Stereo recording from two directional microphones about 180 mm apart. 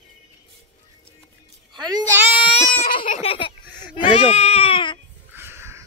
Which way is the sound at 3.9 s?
30° left (ahead or behind).